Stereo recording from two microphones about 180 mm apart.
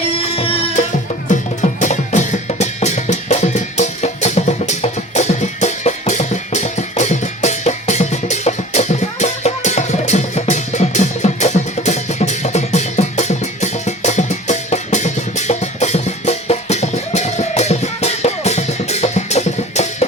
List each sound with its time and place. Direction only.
0.1 s music: 30° left (ahead or behind)
1.8 s drum: 40° left (ahead or behind)